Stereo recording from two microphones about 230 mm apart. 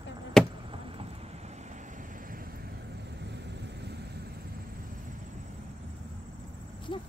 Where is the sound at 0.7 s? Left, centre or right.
Right.